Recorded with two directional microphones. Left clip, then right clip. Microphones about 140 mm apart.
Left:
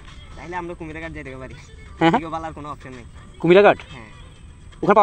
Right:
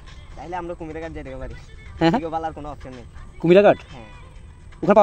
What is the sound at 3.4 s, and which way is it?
Speech, 60° right (ahead or behind).